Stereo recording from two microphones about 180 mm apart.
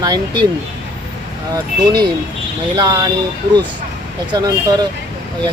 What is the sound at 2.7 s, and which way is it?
Speech, 20° right (ahead or behind).